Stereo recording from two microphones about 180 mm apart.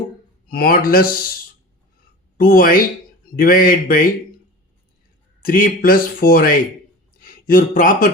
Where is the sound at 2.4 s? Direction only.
55° left (ahead or behind).